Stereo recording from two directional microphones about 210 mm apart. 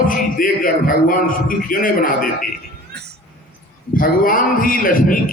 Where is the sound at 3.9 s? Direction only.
40° left (ahead or behind).